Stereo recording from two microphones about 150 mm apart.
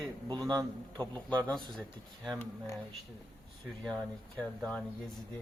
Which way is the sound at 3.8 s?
5° left (ahead or behind).